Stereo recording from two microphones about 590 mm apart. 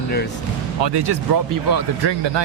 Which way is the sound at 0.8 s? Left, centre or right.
Right.